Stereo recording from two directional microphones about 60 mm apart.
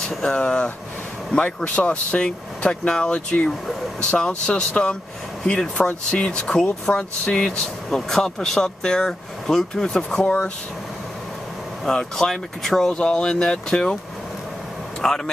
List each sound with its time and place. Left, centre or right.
0.0 s speech: centre
11.8 s speech: centre
15.0 s speech: centre